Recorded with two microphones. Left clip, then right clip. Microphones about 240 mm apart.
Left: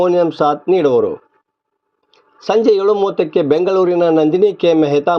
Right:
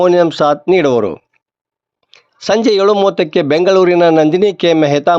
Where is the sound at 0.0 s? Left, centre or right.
Right.